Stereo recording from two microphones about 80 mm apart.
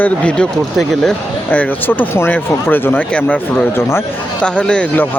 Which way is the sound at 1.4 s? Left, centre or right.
Left.